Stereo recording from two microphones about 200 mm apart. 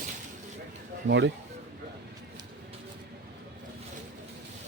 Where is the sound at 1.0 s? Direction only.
60° right (ahead or behind).